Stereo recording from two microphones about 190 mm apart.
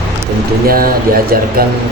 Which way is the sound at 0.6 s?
50° right (ahead or behind).